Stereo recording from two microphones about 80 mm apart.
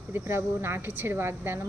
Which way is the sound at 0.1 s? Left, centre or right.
Right.